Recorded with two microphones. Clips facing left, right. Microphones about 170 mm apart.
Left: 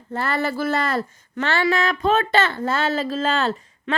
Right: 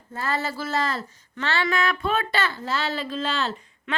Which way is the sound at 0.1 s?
65° left (ahead or behind).